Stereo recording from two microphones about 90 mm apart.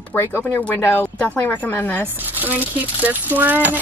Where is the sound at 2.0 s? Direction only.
20° right (ahead or behind).